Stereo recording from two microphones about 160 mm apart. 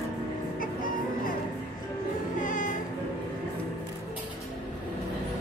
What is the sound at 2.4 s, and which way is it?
Music, 55° left (ahead or behind).